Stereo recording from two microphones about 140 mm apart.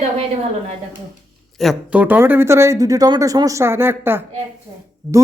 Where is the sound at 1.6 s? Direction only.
5° right (ahead or behind).